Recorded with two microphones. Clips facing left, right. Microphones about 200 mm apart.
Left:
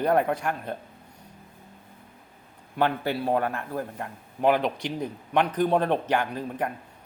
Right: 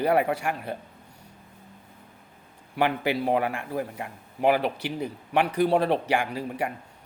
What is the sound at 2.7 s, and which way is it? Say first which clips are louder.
A man's voice: right 1 dB; 10° right (ahead or behind).